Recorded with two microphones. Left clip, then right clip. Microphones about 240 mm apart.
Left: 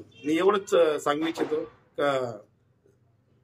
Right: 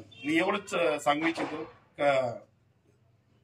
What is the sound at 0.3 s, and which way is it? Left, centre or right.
A man's voice, centre.